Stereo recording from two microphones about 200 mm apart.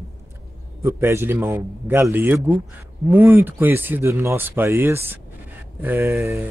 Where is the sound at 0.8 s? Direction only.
15° right (ahead or behind).